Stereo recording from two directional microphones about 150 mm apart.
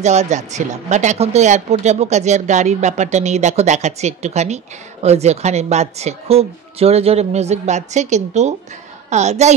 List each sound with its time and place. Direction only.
0.0 s speech: 50° right (ahead or behind)